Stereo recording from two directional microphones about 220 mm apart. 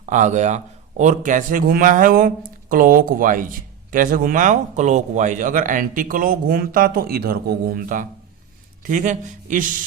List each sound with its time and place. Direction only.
0.0 s speech: 35° right (ahead or behind)